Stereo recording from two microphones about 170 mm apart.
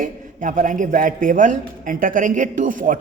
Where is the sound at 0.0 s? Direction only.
50° right (ahead or behind).